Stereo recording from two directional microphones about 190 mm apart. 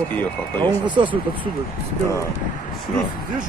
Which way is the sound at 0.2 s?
10° left (ahead or behind).